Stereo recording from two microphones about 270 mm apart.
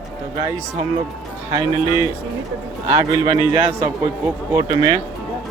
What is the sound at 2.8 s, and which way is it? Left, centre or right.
Speech, centre.